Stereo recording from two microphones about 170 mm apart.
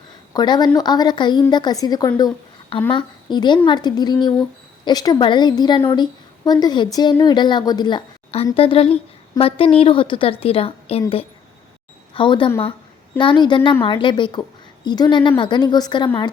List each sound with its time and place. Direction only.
0.3 s a woman's voice: 25° left (ahead or behind)
12.1 s a woman's voice: 30° left (ahead or behind)